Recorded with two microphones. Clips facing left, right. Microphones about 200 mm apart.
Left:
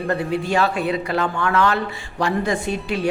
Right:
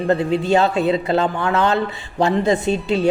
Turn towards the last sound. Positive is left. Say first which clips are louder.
# right 5 dB
turn(degrees=-25)  # may be behind; listen again after turning